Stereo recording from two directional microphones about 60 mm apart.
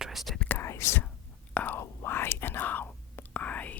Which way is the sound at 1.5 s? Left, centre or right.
Left.